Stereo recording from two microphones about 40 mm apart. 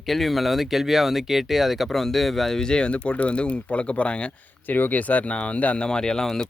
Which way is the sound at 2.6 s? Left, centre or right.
Centre.